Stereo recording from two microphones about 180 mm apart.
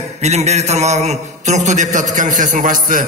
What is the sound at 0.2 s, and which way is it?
A man's voice, 40° right (ahead or behind).